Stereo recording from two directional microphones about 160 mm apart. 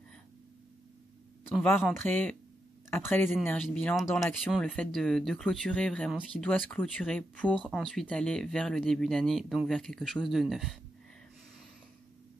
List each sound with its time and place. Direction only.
1.5 s speech: 10° left (ahead or behind)